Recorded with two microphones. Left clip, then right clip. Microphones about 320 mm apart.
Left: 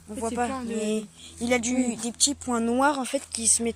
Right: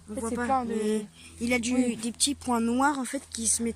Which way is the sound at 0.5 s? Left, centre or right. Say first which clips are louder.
Right 3 dB; right.